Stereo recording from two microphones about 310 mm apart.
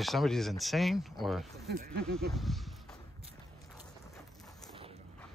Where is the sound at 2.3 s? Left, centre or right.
Centre.